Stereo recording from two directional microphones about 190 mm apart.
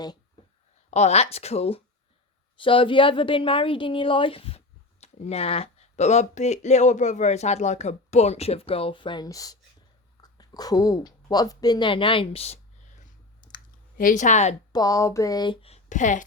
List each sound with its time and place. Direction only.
0.9 s a woman's voice: 35° left (ahead or behind)
14.0 s a woman's voice: 40° left (ahead or behind)
14.7 s speech: 20° left (ahead or behind); by 16.2 s 40° left (ahead or behind)